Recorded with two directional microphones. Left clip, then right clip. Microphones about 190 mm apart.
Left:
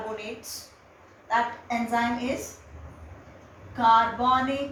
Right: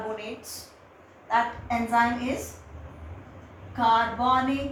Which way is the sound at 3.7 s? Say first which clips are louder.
Left 2 dB; 15° left (ahead or behind).